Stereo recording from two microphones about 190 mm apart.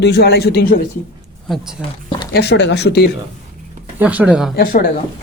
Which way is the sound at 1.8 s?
5° right (ahead or behind).